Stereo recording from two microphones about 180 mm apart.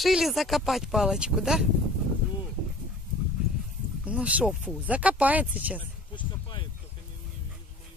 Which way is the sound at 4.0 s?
5° right (ahead or behind).